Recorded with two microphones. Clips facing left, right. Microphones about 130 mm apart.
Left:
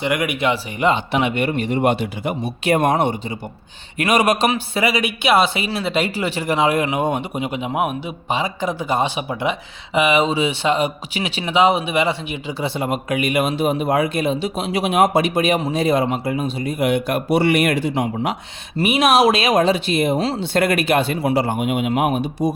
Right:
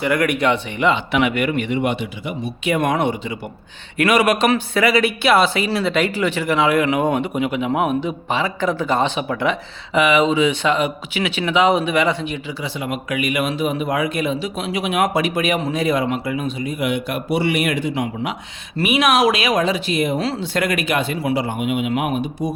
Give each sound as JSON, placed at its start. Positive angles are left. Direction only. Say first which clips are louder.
{"t": 0.0, "sound": "speech", "louder": "right 2 dB", "side_deg": 20}
{"t": 0.8, "sound": "speech", "louder": "left 2 dB", "side_deg": 40}
{"t": 1.2, "sound": "speech", "louder": "right 1 dB", "side_deg": 25}
{"t": 4.1, "sound": "speech", "louder": "even", "side_deg": 40}
{"t": 4.7, "sound": "speech", "louder": "right 3 dB", "side_deg": 20}
{"t": 6.1, "sound": "speech", "louder": "right 1 dB", "side_deg": 35}
{"t": 6.9, "sound": "speech", "louder": "right 2 dB", "side_deg": 20}
{"t": 7.7, "sound": "speech", "louder": "right 3 dB", "side_deg": 10}
{"t": 18.9, "sound": "speech", "louder": "left 1 dB", "side_deg": 30}